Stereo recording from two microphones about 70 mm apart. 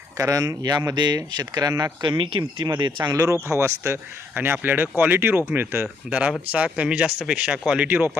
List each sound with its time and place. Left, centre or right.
0.2 s speech: right
2.6 s speech: right
3.1 s speech: right
3.5 s speech: right
6.1 s speech: centre
7.9 s speech: right